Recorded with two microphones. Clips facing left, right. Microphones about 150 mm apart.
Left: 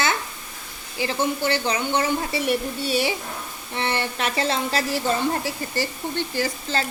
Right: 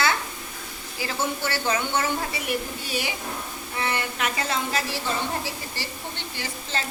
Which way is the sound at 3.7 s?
30° left (ahead or behind).